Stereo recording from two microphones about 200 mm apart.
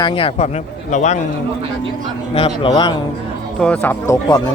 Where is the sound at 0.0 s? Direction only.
25° left (ahead or behind).